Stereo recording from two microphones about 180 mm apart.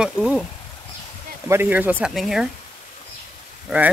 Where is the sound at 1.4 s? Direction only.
10° right (ahead or behind).